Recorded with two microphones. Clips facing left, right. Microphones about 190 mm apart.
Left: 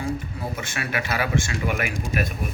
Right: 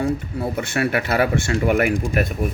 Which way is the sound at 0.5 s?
60° right (ahead or behind).